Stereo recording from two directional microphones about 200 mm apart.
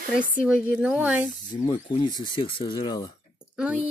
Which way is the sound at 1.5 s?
20° left (ahead or behind).